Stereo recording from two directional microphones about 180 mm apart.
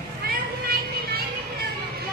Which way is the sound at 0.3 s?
55° right (ahead or behind).